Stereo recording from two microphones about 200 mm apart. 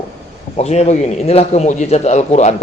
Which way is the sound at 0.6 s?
35° left (ahead or behind).